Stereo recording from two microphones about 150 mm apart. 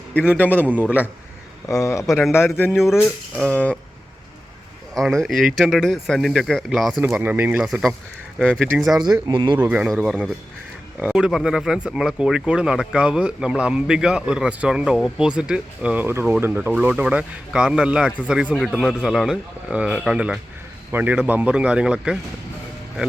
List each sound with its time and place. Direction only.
0.1 s a man's voice: 10° left (ahead or behind)
0.6 s speech: 10° right (ahead or behind)
1.6 s a man's voice: 20° left (ahead or behind)
2.7 s speech: 5° right (ahead or behind)
3.4 s a man's voice: 10° left (ahead or behind)
5.2 s speech: centre (ahead or behind)
7.0 s speech: 15° right (ahead or behind)
9.2 s speech: 30° right (ahead or behind)
9.6 s speech: 10° right (ahead or behind)